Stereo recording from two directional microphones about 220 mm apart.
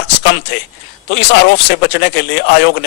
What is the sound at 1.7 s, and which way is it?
Speech, 50° left (ahead or behind).